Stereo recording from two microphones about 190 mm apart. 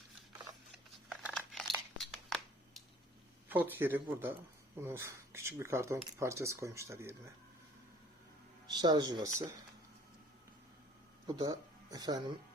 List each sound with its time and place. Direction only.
0.7 s crumpling: centre (ahead or behind)
3.5 s speech: 10° right (ahead or behind)
8.7 s speech: 20° right (ahead or behind)
11.3 s speech: 20° right (ahead or behind)